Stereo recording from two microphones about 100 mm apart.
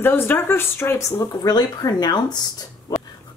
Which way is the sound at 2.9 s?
35° left (ahead or behind).